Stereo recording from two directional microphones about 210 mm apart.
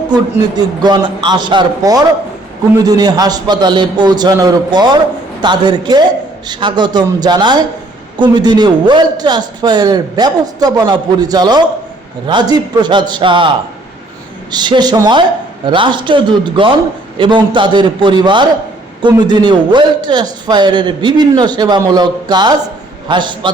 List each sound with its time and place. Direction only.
0.1 s a man's voice: 20° right (ahead or behind)
14.5 s a man's voice: 20° right (ahead or behind)